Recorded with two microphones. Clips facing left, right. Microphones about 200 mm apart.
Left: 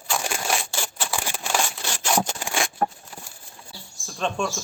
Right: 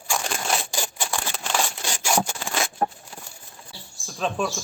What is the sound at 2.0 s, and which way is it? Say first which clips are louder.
Sawing: even; 10° right (ahead or behind).